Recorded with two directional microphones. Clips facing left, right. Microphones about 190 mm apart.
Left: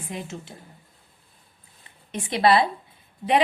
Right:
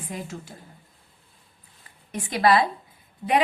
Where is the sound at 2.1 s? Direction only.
25° left (ahead or behind).